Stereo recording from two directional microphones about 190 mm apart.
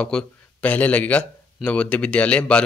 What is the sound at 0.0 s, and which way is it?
Speech, 5° left (ahead or behind).